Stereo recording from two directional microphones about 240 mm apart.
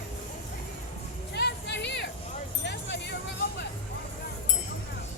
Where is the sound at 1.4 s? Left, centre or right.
Left.